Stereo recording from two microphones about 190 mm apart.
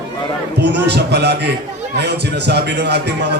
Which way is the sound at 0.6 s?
65° right (ahead or behind).